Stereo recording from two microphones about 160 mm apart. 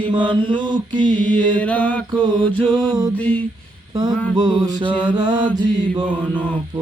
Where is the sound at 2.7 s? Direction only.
25° right (ahead or behind).